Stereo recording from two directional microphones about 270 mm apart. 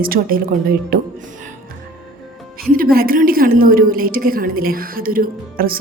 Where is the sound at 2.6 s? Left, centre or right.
Right.